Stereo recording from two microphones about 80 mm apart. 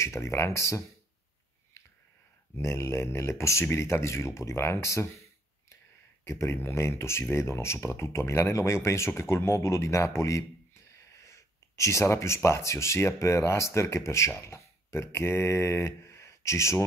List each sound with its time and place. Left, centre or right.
0.0 s speech: left
2.5 s speech: left
6.2 s speech: left